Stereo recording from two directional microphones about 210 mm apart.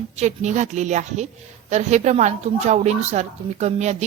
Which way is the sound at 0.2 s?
35° right (ahead or behind).